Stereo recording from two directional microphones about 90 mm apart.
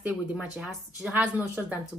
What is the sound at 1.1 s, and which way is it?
Speech, 20° right (ahead or behind).